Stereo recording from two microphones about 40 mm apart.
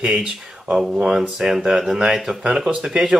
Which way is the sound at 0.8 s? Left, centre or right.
Centre.